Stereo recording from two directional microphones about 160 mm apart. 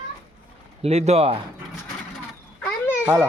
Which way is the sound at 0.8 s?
40° right (ahead or behind).